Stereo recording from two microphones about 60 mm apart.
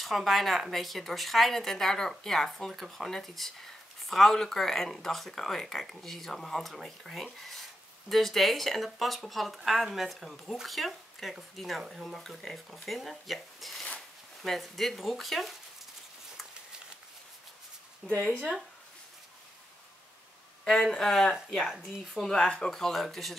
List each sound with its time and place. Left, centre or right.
0.0 s speech: centre
18.1 s speech: left
20.6 s speech: centre
21.6 s speech: centre
22.3 s speech: centre